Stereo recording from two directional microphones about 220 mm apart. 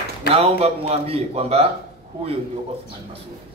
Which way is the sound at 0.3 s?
25° right (ahead or behind).